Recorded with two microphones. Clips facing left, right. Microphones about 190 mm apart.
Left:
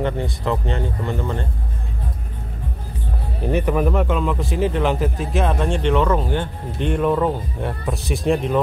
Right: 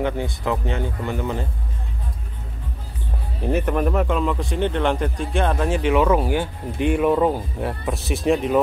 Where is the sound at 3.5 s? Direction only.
Centre (ahead or behind).